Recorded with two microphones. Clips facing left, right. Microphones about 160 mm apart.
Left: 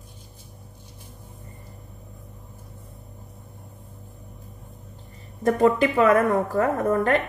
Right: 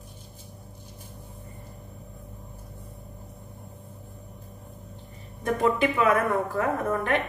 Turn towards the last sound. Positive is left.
turn(degrees=40)  # may be behind; listen again after turning